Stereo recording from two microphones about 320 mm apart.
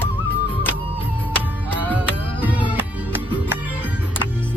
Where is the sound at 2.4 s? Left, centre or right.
Centre.